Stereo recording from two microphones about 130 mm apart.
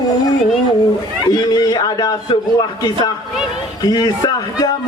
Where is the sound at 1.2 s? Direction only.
30° left (ahead or behind).